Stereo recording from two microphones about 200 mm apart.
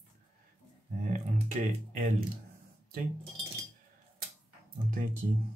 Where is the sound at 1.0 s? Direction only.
35° right (ahead or behind).